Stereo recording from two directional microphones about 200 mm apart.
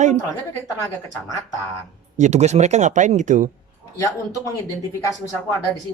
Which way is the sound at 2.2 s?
35° right (ahead or behind).